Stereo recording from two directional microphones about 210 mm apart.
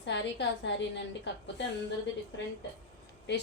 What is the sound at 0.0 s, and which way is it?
A woman's voice, 60° left (ahead or behind).